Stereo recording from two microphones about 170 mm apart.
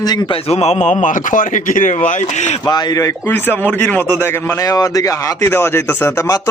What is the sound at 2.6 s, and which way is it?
A man's voice, 25° left (ahead or behind).